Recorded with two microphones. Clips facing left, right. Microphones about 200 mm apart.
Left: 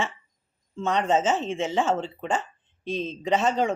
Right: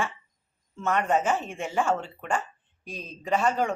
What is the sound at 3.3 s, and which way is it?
Speech, 20° left (ahead or behind).